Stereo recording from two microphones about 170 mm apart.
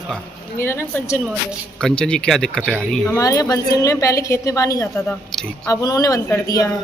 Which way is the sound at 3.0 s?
15° left (ahead or behind).